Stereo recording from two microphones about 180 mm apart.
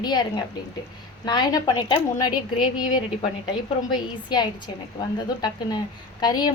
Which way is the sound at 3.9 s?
25° left (ahead or behind).